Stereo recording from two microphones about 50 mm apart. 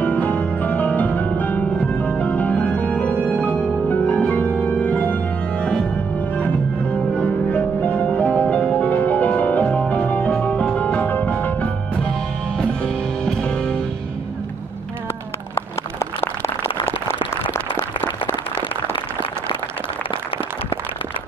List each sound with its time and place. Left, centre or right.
0.0 s music: left
4.0 s organ: left
6.1 s music: left
12.5 s music: centre
15.5 s a sound: left